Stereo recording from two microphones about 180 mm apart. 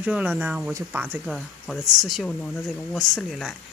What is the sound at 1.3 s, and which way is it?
Speech, centre (ahead or behind).